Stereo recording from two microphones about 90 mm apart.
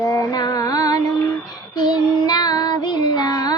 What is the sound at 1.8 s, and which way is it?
Child singing, 50° left (ahead or behind).